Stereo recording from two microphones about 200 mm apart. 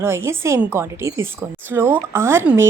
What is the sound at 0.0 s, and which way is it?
Speech, 10° right (ahead or behind).